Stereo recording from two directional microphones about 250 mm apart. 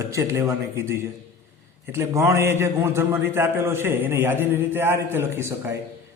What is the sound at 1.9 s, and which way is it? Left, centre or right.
A man's voice, centre.